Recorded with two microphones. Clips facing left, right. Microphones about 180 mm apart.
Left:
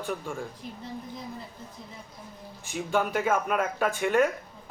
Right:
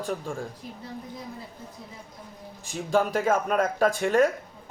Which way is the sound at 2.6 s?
35° right (ahead or behind).